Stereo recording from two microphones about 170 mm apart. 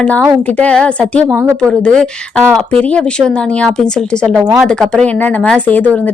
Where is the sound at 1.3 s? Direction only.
15° right (ahead or behind).